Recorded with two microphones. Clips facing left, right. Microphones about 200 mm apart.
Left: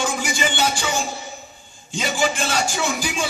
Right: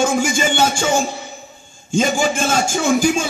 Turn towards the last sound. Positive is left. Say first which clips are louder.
# right 9 dB
turn(degrees=-45)  # may be behind; listen again after turning